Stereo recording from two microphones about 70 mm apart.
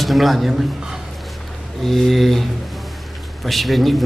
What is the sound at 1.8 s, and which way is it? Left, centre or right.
Speech, centre.